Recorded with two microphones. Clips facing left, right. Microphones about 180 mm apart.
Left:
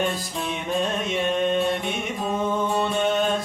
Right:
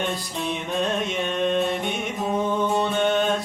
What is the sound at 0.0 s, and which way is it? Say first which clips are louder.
Music: left 1 dB; centre (ahead or behind).